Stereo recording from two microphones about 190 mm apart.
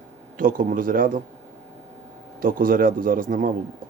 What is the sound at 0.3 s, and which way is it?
Speech, 45° right (ahead or behind).